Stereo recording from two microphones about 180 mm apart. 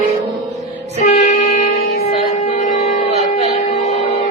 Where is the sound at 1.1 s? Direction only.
35° left (ahead or behind).